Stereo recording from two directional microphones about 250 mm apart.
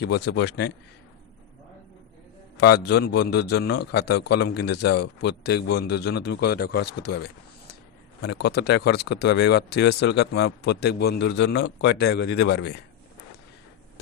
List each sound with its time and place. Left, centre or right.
0.0 s speech: left
2.6 s speech: left